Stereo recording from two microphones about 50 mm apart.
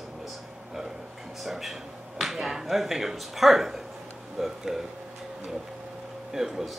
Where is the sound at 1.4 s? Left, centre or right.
Centre.